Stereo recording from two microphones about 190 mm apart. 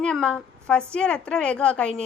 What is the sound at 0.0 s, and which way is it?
A woman's voice, 5° left (ahead or behind).